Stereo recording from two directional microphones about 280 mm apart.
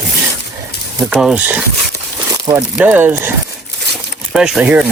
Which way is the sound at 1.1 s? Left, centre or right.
Centre.